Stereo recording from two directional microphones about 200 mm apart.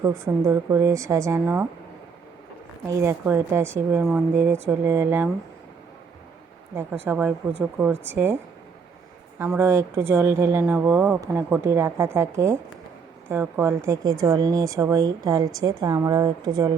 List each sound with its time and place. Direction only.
0.0 s speech: 15° right (ahead or behind)
2.9 s speech: 15° right (ahead or behind)
6.7 s speech: 10° right (ahead or behind)
9.4 s a woman's voice: 10° right (ahead or behind)